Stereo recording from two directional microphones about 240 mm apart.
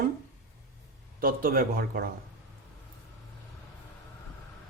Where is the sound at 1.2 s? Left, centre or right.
Right.